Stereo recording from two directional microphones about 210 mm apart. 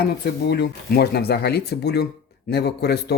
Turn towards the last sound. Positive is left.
turn(degrees=50)  # may be behind; listen again after turning